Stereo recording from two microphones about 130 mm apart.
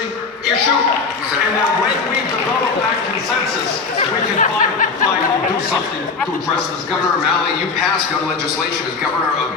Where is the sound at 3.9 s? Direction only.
80° left.